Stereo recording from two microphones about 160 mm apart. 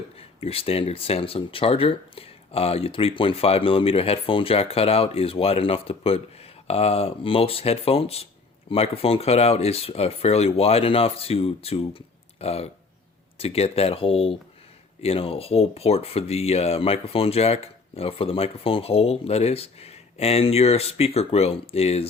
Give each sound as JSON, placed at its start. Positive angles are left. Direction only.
{"t": 0.2, "sound": "speech", "side_deg": 40}